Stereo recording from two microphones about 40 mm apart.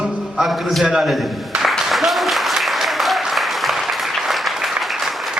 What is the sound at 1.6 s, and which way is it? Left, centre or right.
Applause, centre.